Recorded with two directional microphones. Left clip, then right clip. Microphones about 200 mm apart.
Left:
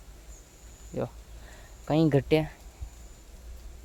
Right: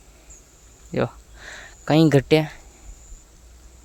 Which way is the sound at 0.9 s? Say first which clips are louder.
Right 9 dB; 35° right (ahead or behind).